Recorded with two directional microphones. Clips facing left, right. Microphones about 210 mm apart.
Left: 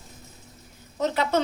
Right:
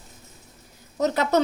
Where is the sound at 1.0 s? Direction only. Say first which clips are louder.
Right 3 dB; 40° right (ahead or behind).